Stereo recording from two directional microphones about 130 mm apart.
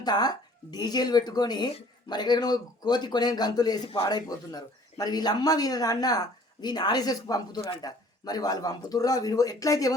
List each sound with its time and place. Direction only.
0.0 s speech: 30° left (ahead or behind)
3.8 s a man's voice: 45° left (ahead or behind)
4.1 s speech: 30° left (ahead or behind)